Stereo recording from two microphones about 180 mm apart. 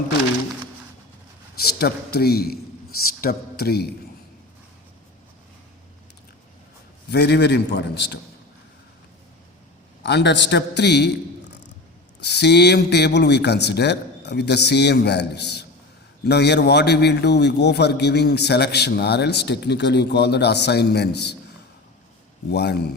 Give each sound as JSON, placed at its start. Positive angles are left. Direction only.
{"t": 1.5, "sound": "a man's voice", "side_deg": 60}
{"t": 7.1, "sound": "a man's voice", "side_deg": 65}
{"t": 10.0, "sound": "a man's voice", "side_deg": 70}
{"t": 12.2, "sound": "a man's voice", "side_deg": 65}
{"t": 22.4, "sound": "a man's voice", "side_deg": 65}